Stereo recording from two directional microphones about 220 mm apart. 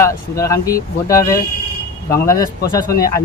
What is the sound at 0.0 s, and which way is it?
Speech, 15° left (ahead or behind).